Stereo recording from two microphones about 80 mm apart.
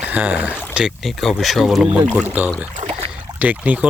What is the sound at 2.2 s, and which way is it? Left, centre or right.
Speech, right.